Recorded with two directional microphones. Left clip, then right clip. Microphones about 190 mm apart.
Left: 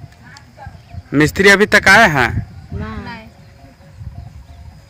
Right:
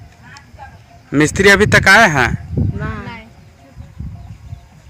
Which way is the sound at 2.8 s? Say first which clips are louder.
Right 3 dB; 55° left (ahead or behind).